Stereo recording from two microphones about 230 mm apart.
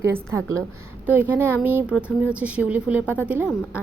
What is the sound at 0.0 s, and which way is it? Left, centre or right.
A woman's voice, centre.